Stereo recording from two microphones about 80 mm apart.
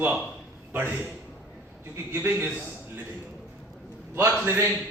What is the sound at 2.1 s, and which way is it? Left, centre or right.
Speech, right.